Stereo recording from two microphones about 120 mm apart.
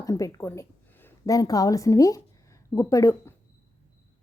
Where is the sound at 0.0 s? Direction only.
25° left (ahead or behind).